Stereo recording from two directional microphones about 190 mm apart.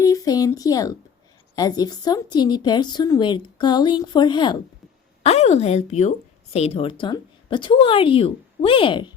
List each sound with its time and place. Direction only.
0.0 s a sound: 20° left (ahead or behind)
1.5 s a woman's voice: 20° left (ahead or behind)
5.2 s a woman's voice: 35° left (ahead or behind)